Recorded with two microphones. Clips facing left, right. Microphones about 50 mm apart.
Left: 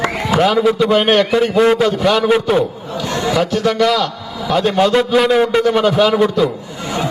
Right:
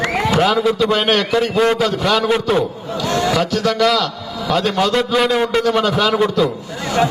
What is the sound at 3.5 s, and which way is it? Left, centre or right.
Speech, left.